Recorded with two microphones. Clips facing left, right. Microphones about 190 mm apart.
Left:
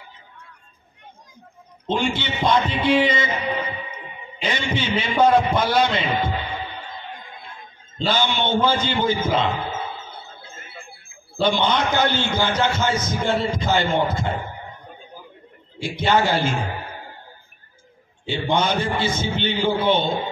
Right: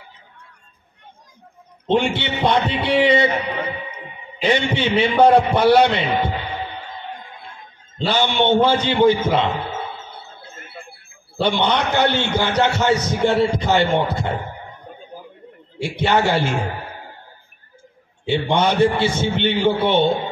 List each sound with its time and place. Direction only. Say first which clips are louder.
1.9 s a man's voice: right 4 dB; 65° right (ahead or behind)
4.4 s a man's voice: right 6 dB; 65° right (ahead or behind)
8.0 s a man's voice: right 3 dB; 65° right (ahead or behind)
11.3 s a man's voice: right 1 dB; 65° right (ahead or behind)
15.8 s a man's voice: right 1 dB; 65° right (ahead or behind)
18.2 s a man's voice: right 4 dB; 70° right (ahead or behind)